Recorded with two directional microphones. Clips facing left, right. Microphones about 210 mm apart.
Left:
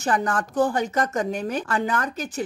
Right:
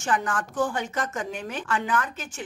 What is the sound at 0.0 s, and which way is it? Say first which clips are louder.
Speech: left 3 dB; 40° left (ahead or behind).